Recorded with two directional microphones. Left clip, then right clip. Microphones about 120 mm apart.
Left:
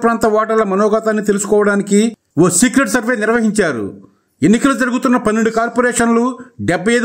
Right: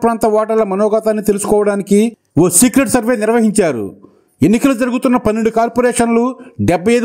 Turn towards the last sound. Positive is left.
turn(degrees=-35)  # may be behind; listen again after turning